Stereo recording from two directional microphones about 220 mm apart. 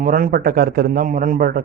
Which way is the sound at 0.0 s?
40° right (ahead or behind).